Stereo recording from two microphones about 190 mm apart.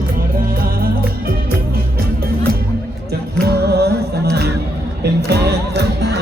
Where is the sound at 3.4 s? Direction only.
60° right (ahead or behind).